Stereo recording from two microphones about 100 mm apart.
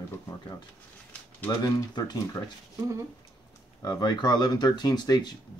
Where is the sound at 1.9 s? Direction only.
45° left (ahead or behind).